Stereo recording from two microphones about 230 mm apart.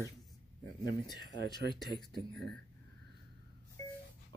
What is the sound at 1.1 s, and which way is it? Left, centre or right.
Speech, centre.